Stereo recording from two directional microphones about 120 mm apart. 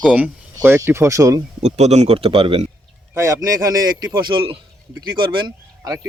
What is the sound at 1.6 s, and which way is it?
Speech, 65° right (ahead or behind).